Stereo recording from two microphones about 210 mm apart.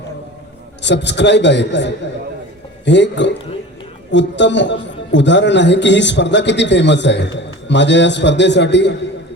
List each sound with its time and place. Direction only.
0.8 s a man's voice: 55° left (ahead or behind)